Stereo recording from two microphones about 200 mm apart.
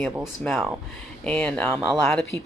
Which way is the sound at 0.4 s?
Centre (ahead or behind).